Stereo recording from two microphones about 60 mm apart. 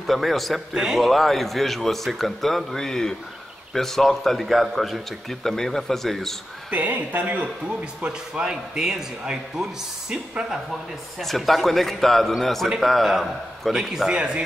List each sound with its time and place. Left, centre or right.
0.0 s a man's voice: centre
6.7 s speech: right
8.0 s speech: centre
11.1 s a man's voice: centre
14.1 s speech: centre